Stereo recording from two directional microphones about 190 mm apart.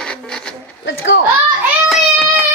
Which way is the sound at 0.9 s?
70° left (ahead or behind).